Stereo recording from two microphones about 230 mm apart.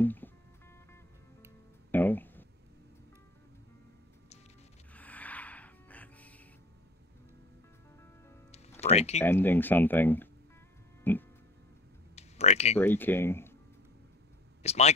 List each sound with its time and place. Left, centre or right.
0.0 s music: centre
1.9 s music: centre
4.9 s music: centre
8.8 s speech: left
9.2 s speech: centre
12.2 s clicking: left
12.7 s speech: centre
14.6 s speech: left